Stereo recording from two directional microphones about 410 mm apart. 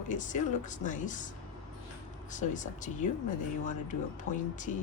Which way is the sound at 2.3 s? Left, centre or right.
Centre.